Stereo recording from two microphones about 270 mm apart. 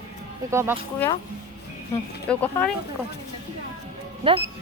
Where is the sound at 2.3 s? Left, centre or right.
Centre.